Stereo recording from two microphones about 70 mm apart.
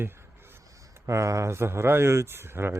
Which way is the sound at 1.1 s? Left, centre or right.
Right.